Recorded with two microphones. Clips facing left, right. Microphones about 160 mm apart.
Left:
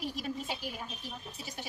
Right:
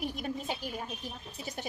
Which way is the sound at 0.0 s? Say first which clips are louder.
Right 2 dB; 55° right (ahead or behind).